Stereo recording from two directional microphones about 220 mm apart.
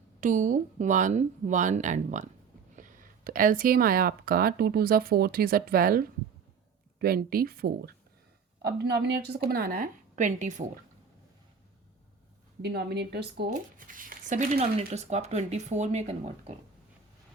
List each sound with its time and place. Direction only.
0.2 s speech: 35° right (ahead or behind)
7.0 s speech: 45° right (ahead or behind)
12.6 s speech: 50° right (ahead or behind)
13.5 s speech: 40° right (ahead or behind)